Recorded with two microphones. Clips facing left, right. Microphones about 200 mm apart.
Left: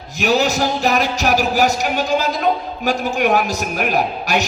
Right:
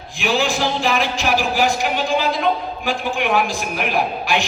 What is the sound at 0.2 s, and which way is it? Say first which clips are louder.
Music: left 3 dB; 40° left (ahead or behind).